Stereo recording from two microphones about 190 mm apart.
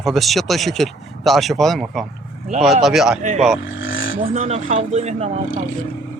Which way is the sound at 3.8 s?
85° left.